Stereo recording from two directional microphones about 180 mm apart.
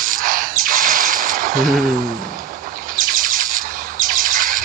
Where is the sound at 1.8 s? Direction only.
50° right (ahead or behind).